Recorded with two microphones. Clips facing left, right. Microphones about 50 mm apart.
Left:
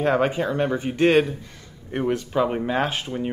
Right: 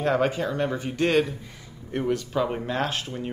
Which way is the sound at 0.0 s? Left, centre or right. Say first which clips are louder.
Left 3 dB; centre.